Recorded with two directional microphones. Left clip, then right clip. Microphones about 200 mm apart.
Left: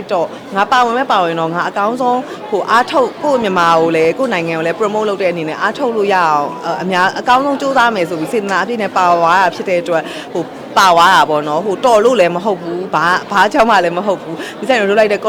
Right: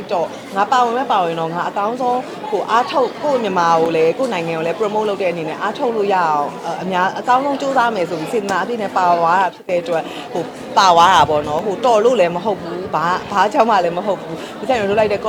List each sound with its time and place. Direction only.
0.1 s speech: 25° left (ahead or behind)